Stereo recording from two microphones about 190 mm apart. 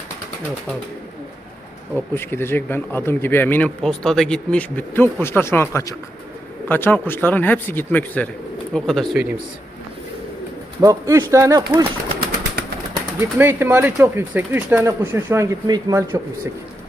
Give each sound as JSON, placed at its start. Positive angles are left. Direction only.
{"t": 2.1, "sound": "speech", "side_deg": 10}
{"t": 10.8, "sound": "speech", "side_deg": -15}
{"t": 13.1, "sound": "speech", "side_deg": -10}